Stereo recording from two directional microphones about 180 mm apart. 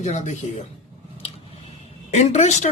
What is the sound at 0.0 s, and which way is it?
Speech, 40° left (ahead or behind).